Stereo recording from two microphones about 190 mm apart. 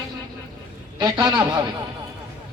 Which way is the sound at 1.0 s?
20° right (ahead or behind).